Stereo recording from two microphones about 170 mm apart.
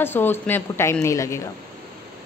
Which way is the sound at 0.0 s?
10° left (ahead or behind).